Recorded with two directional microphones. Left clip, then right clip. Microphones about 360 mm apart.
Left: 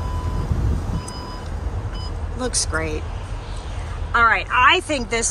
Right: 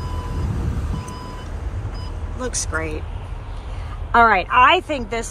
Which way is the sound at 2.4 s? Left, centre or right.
Centre.